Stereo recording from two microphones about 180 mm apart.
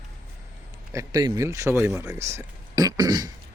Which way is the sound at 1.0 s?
20° right (ahead or behind).